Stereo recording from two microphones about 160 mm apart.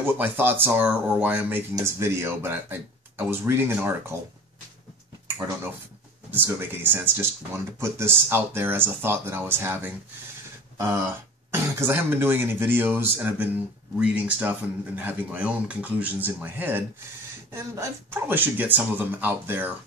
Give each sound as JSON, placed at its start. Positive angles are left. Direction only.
{"t": 0.2, "sound": "speech", "side_deg": -10}
{"t": 6.3, "sound": "speech", "side_deg": -10}